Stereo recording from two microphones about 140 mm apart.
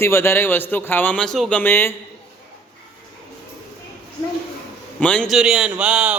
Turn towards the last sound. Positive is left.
turn(degrees=-5)  # may be behind; listen again after turning